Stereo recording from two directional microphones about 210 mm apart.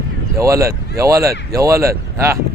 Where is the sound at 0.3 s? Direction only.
15° right (ahead or behind).